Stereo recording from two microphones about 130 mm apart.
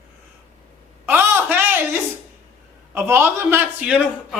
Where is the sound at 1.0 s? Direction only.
15° right (ahead or behind).